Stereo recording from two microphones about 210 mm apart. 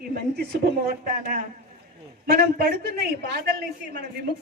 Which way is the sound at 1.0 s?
40° right (ahead or behind).